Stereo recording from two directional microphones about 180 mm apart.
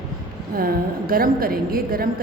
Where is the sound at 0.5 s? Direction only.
55° right (ahead or behind).